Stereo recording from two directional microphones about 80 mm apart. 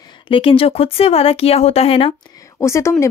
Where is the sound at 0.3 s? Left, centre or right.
Left.